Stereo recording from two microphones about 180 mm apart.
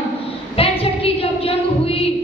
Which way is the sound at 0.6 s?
30° left (ahead or behind).